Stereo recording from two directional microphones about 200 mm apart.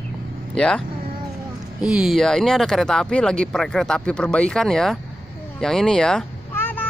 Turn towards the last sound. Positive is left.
turn(degrees=10)  # may be behind; listen again after turning